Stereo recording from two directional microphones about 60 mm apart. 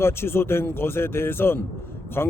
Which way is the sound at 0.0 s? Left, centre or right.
Left.